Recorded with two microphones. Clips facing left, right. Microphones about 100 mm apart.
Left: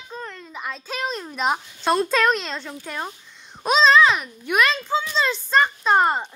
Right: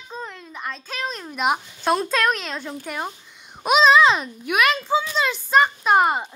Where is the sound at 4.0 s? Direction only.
25° right (ahead or behind).